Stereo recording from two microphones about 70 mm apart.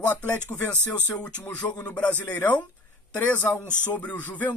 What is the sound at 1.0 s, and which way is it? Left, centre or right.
A woman's voice, centre.